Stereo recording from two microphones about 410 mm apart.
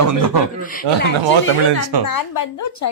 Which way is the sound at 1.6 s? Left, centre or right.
Right.